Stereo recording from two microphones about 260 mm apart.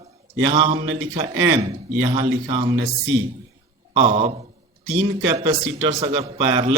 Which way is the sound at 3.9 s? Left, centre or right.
Right.